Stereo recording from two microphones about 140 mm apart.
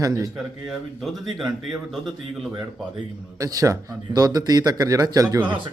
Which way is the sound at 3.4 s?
25° right (ahead or behind).